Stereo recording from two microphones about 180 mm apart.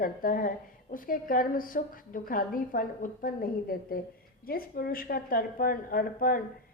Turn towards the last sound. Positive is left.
turn(degrees=55)  # may be behind; listen again after turning